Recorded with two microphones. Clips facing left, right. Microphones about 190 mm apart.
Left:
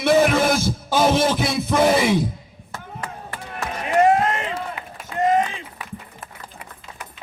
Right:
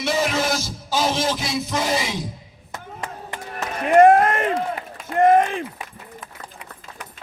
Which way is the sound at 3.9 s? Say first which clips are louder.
Right 4 dB; 55° right (ahead or behind).